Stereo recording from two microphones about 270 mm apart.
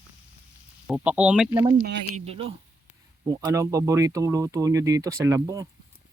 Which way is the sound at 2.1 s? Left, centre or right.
Right.